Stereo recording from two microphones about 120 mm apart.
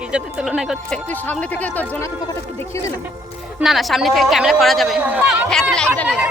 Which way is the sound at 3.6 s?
Centre (ahead or behind).